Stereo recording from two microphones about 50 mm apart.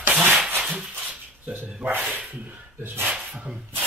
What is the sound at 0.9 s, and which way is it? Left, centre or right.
Dog, right.